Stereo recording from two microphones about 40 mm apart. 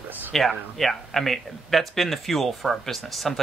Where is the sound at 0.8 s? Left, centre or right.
Centre.